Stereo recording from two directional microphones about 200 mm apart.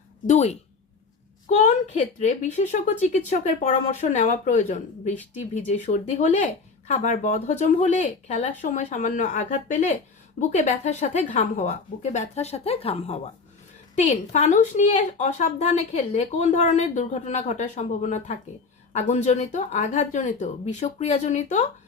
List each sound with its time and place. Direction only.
0.3 s a woman's voice: 35° left (ahead or behind)